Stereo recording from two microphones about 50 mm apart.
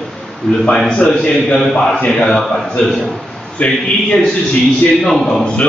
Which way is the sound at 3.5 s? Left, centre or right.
Centre.